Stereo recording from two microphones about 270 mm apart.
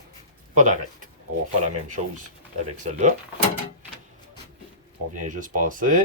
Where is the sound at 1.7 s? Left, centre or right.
Right.